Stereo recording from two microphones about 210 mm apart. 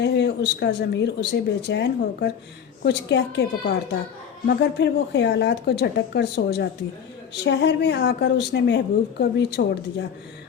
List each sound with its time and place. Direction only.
0.0 s speech: 55° left (ahead or behind)